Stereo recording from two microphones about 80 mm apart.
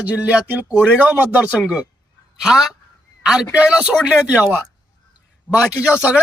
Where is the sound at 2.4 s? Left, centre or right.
Centre.